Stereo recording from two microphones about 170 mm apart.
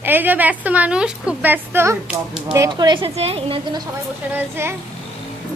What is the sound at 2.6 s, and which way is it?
A woman's voice, 25° right (ahead or behind).